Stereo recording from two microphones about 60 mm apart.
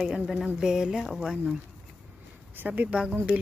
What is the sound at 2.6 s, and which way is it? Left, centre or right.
Speech, right.